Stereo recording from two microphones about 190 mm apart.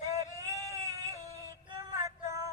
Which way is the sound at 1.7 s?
15° right (ahead or behind).